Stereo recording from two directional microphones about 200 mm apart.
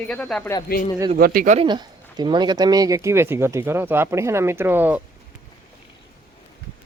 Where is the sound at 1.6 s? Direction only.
20° right (ahead or behind).